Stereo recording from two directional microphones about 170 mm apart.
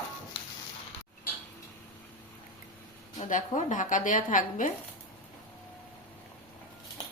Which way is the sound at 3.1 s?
45° left (ahead or behind).